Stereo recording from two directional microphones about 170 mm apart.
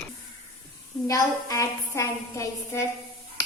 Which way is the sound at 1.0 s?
20° left (ahead or behind).